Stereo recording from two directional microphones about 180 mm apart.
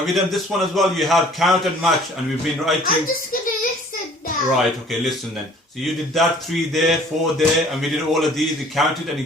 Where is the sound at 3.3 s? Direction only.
50° left (ahead or behind).